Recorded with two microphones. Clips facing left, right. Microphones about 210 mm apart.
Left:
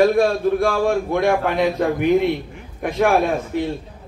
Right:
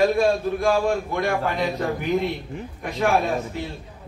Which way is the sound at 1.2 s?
65° left (ahead or behind).